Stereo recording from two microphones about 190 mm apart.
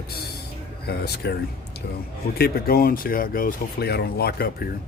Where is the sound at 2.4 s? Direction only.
50° left (ahead or behind).